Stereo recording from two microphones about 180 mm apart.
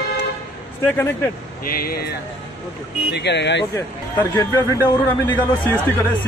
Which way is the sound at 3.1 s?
75° left (ahead or behind).